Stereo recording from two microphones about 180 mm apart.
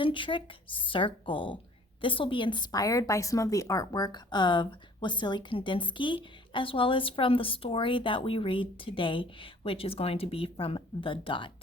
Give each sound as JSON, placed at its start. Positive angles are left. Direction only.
{"t": 0.0, "sound": "a woman's voice", "side_deg": 25}